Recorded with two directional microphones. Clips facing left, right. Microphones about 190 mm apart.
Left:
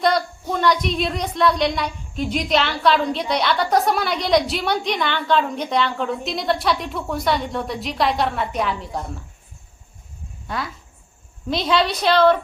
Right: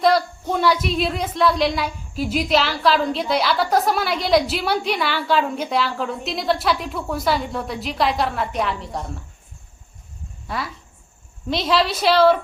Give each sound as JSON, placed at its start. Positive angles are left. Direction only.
{"t": 0.0, "sound": "speech", "side_deg": 0}
{"t": 10.4, "sound": "speech", "side_deg": 0}